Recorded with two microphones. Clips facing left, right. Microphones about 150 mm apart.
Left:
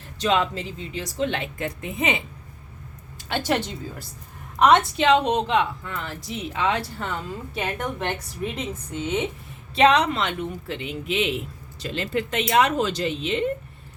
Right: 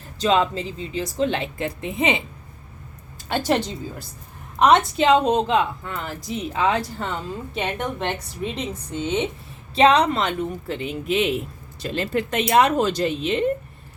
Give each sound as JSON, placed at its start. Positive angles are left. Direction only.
{"t": 0.2, "sound": "speech", "side_deg": -30}
{"t": 3.2, "sound": "speech", "side_deg": -40}
{"t": 4.9, "sound": "speech", "side_deg": -35}
{"t": 7.1, "sound": "a woman's voice", "side_deg": -25}